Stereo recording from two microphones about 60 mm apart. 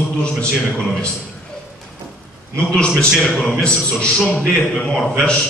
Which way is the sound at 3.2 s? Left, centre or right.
Centre.